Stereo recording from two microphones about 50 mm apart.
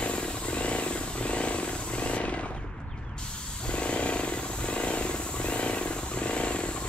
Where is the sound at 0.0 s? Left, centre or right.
Left.